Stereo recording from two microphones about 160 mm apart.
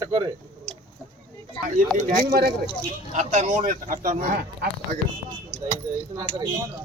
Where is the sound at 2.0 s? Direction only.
55° right (ahead or behind).